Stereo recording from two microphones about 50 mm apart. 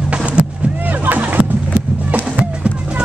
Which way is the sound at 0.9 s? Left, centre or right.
Right.